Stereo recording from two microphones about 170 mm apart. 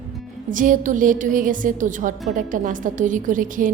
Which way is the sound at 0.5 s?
50° right (ahead or behind).